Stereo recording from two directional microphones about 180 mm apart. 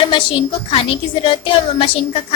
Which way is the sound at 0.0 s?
25° left (ahead or behind).